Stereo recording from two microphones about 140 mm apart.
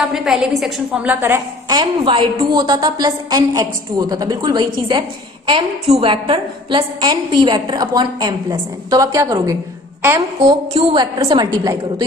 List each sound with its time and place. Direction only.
0.0 s a woman's voice: 5° right (ahead or behind)
1.7 s a woman's voice: 35° right (ahead or behind)
5.5 s a woman's voice: 40° right (ahead or behind); by 10.6 s 25° right (ahead or behind)
10.7 s a woman's voice: 45° right (ahead or behind)
11.0 s a woman's voice: 30° right (ahead or behind)